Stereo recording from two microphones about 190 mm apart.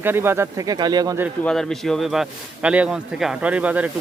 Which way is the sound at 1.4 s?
Centre (ahead or behind).